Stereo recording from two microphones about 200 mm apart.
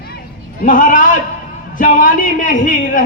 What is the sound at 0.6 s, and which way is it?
A man's voice, 40° left (ahead or behind).